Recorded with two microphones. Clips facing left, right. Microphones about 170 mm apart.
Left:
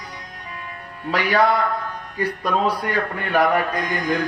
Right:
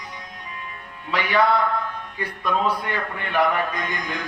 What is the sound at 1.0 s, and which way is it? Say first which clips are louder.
A man's voice: left 2 dB; 40° left (ahead or behind).